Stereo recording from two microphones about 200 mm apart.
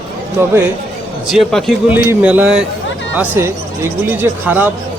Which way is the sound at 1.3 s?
Centre (ahead or behind).